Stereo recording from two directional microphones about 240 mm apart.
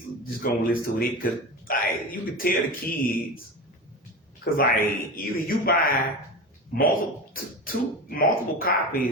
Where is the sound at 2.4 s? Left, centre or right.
Left.